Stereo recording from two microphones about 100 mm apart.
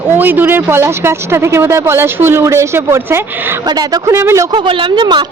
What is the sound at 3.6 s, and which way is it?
Speech, 45° right (ahead or behind).